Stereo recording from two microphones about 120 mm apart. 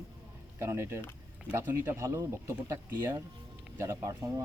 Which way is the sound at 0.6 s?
20° right (ahead or behind).